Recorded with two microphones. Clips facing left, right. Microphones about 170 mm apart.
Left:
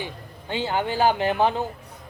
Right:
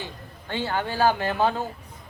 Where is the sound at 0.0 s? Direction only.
15° left (ahead or behind).